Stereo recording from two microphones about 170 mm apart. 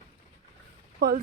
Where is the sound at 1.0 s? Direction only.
90° right.